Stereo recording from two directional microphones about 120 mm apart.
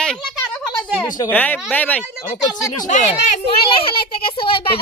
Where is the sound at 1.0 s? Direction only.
35° left (ahead or behind).